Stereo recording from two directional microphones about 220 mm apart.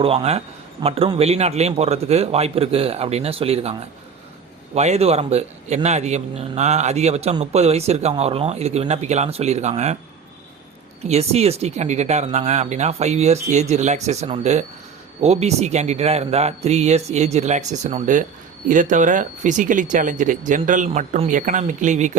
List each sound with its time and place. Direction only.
0.0 s a man's voice: 25° right (ahead or behind)
11.0 s a man's voice: 30° right (ahead or behind)